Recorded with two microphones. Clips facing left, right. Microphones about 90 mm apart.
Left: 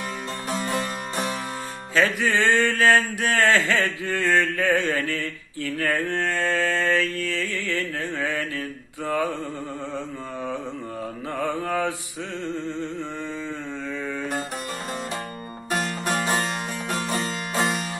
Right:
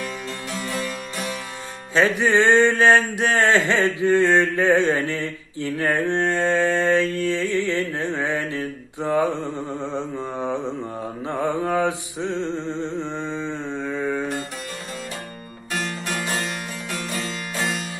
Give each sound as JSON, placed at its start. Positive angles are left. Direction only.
{"t": 0.5, "sound": "music", "side_deg": 40}
{"t": 2.0, "sound": "mantra", "side_deg": -20}
{"t": 15.7, "sound": "music", "side_deg": 35}